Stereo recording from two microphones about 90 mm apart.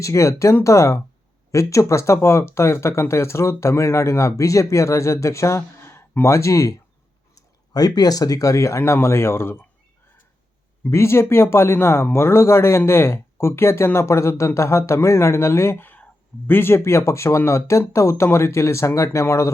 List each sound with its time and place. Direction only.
0.0 s speech: 35° left (ahead or behind)
10.8 s speech: 30° left (ahead or behind)